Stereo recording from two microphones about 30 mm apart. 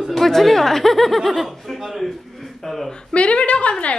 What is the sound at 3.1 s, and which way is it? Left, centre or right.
Speech, left.